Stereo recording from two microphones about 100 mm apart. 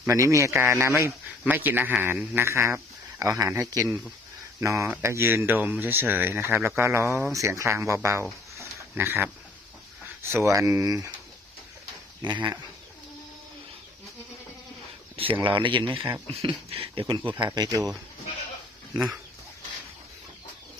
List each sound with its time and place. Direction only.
0.1 s a man's voice: 30° right (ahead or behind)
12.2 s speech: 45° right (ahead or behind)
15.1 s a sound: 65° right (ahead or behind)
15.4 s speech: 55° right (ahead or behind)
16.5 s speech: 70° right (ahead or behind)
17.4 s speech: 45° right (ahead or behind)